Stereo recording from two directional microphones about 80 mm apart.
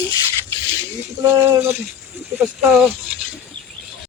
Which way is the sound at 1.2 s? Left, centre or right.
Right.